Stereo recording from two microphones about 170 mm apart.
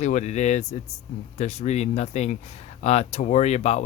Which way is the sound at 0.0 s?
45° left (ahead or behind).